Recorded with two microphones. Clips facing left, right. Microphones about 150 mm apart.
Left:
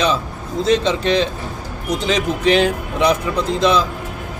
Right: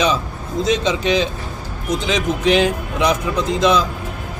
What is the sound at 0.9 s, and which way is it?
A man's voice, 5° right (ahead or behind).